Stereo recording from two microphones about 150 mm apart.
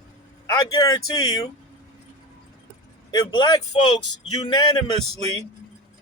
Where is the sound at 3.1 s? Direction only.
25° left (ahead or behind).